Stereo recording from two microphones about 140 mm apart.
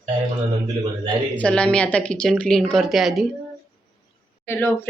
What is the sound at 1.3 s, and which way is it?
Speech, 10° left (ahead or behind).